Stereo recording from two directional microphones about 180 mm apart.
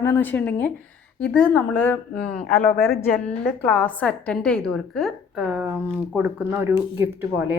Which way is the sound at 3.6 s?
10° left (ahead or behind).